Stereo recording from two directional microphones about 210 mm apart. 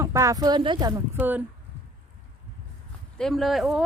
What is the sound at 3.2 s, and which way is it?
Speech, centre (ahead or behind).